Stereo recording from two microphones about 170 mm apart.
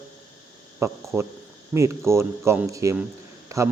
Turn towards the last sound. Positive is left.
turn(degrees=-20)  # may be behind; listen again after turning